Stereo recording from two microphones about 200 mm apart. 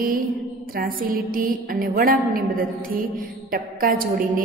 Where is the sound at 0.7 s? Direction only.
45° right (ahead or behind).